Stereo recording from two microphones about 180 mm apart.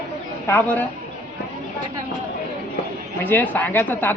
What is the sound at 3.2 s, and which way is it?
Speech, 10° left (ahead or behind).